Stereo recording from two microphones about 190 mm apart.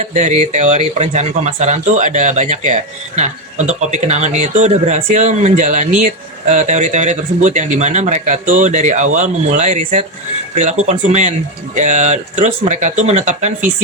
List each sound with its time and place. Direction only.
0.0 s speech: 40° right (ahead or behind)